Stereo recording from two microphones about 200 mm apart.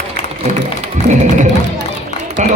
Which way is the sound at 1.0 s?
55° right (ahead or behind).